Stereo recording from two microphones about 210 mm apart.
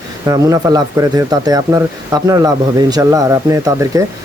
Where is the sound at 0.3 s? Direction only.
15° right (ahead or behind).